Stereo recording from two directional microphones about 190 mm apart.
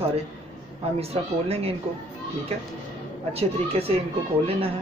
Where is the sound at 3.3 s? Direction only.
30° right (ahead or behind).